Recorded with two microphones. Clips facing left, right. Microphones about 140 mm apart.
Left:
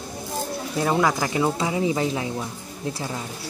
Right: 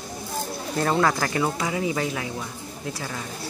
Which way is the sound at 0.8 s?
10° left (ahead or behind).